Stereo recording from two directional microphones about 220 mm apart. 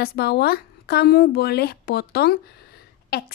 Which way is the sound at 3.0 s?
45° left (ahead or behind).